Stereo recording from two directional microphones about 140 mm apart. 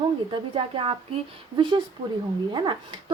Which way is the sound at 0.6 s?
40° right (ahead or behind).